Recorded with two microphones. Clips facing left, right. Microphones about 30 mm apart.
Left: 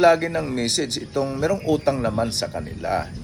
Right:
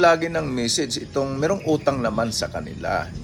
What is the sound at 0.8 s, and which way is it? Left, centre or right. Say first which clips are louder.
Speech: even; centre.